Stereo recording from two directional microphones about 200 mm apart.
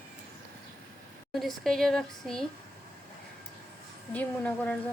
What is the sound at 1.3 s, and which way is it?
Speech, centre (ahead or behind).